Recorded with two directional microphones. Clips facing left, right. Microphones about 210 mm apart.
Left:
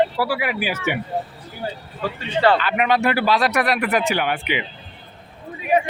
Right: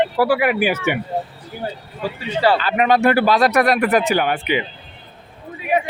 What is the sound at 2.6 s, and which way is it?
Speech, 35° right (ahead or behind).